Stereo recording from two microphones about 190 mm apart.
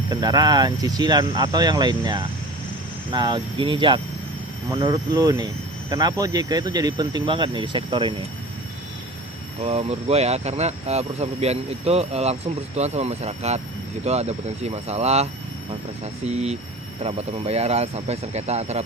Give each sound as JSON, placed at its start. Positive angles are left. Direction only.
{"t": 0.1, "sound": "speech", "side_deg": -20}
{"t": 9.6, "sound": "speech", "side_deg": -30}